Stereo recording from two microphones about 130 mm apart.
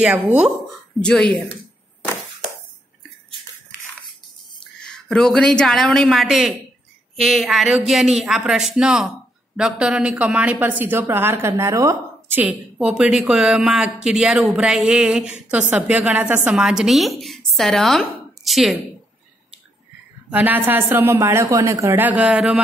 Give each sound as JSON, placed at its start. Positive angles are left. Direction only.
{"t": 0.0, "sound": "speech", "side_deg": -10}
{"t": 1.0, "sound": "speech", "side_deg": 5}
{"t": 4.7, "sound": "a woman's voice", "side_deg": 5}
{"t": 20.2, "sound": "speech", "side_deg": -15}